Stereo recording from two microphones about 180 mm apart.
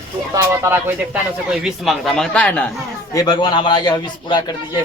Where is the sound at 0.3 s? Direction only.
15° right (ahead or behind); by 2.7 s 5° left (ahead or behind).